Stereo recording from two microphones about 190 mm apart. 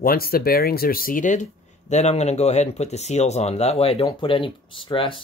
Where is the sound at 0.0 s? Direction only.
50° left (ahead or behind).